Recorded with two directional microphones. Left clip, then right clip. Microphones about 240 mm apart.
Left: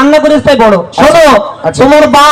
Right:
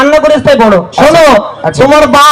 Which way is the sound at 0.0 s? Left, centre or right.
Right.